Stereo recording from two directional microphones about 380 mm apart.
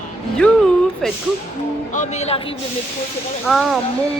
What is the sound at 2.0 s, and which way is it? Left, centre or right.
Speech, centre.